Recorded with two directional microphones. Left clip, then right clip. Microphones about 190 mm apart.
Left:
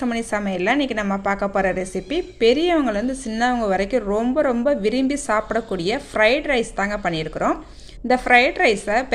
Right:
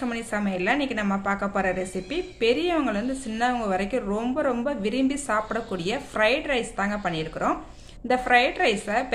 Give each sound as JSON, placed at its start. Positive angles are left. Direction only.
{"t": 0.0, "sound": "a woman's voice", "side_deg": 30}